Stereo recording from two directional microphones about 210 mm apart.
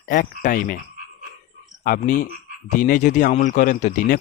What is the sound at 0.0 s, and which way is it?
Speech, 45° left (ahead or behind).